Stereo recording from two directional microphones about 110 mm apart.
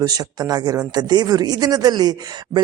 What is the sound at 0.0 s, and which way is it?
Speech, 35° right (ahead or behind).